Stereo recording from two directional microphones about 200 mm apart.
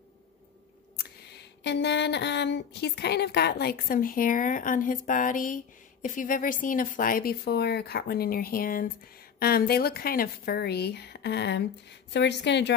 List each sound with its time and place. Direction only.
0.9 s a woman's voice: 60° left (ahead or behind)